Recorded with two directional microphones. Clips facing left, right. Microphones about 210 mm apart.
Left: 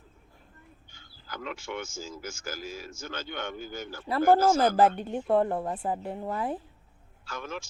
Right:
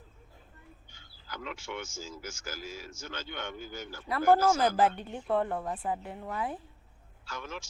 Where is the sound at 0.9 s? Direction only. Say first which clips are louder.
Left 3 dB; 50° left (ahead or behind).